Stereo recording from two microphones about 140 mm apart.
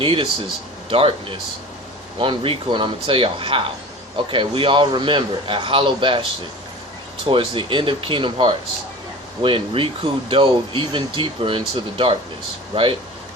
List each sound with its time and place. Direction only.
0.0 s speech: 40° right (ahead or behind)
7.3 s speech: 35° right (ahead or behind)